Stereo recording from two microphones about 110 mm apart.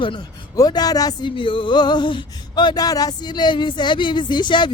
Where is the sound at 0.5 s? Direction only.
35° left (ahead or behind).